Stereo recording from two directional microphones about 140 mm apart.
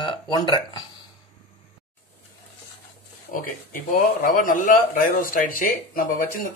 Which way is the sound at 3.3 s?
75° left (ahead or behind).